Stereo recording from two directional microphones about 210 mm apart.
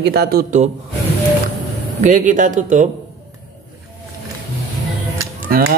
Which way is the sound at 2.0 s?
40° right (ahead or behind).